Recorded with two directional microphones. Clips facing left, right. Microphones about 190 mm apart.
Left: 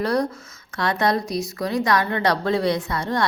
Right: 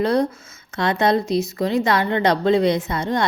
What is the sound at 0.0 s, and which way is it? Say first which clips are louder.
Speech: right 3 dB; 25° right (ahead or behind).